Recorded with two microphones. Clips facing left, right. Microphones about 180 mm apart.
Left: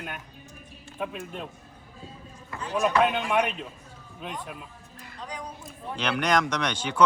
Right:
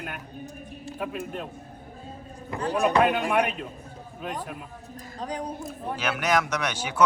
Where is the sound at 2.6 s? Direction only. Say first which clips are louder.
Right 2 dB; 60° right (ahead or behind).